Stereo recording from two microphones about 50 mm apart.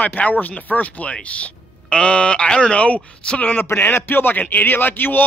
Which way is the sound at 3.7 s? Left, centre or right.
Left.